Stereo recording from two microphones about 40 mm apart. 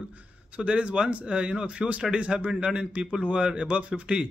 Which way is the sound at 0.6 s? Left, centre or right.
Right.